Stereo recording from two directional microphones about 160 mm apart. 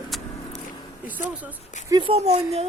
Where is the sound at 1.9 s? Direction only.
35° right (ahead or behind).